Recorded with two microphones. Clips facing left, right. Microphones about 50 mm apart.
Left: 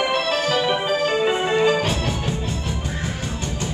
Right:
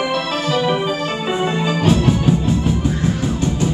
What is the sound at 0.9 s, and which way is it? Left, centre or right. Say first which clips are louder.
Music: left 2 dB; centre.